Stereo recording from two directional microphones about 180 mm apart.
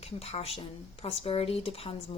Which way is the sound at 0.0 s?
35° left (ahead or behind).